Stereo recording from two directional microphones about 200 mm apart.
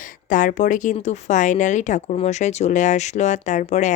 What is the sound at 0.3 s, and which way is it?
Speech, 40° left (ahead or behind).